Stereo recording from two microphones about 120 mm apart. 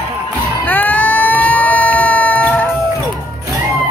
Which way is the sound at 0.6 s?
15° left (ahead or behind).